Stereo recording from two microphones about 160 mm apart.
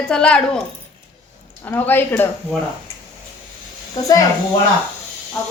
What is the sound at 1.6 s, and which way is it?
Speech, 10° left (ahead or behind).